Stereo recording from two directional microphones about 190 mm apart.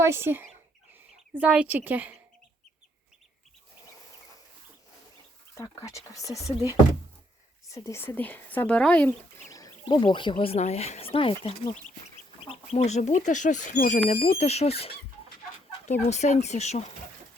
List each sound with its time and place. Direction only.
0.0 s a woman's voice: 15° right (ahead or behind)
5.5 s speech: 15° left (ahead or behind)
7.7 s speech: 15° left (ahead or behind)
9.5 s speech: 20° left (ahead or behind); by 16.8 s 35° left (ahead or behind)